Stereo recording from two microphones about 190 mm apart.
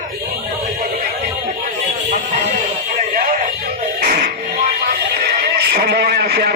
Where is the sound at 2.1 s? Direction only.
35° right (ahead or behind).